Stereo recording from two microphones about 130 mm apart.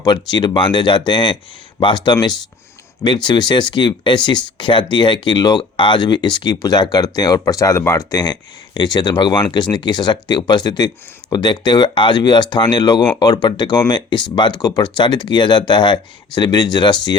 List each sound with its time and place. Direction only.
0.0 s speech: 35° left (ahead or behind)
3.2 s speech: 35° left (ahead or behind)
8.1 s speech: 35° left (ahead or behind)